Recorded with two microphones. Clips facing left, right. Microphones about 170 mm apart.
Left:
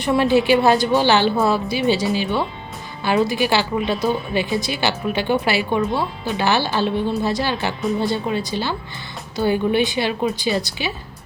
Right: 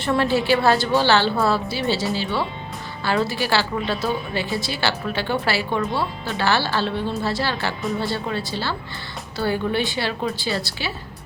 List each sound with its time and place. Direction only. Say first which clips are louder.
0.0 s a woman's voice: left 4 dB; 15° left (ahead or behind)